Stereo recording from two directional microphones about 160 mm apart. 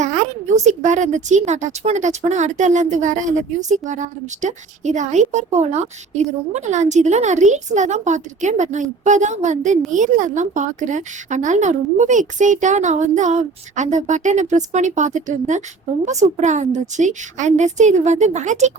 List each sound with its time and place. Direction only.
0.0 s a woman's voice: 50° right (ahead or behind)